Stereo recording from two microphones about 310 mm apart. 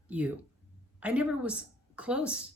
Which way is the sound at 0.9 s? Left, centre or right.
Centre.